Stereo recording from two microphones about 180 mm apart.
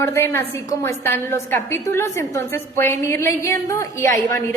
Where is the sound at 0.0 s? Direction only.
15° left (ahead or behind).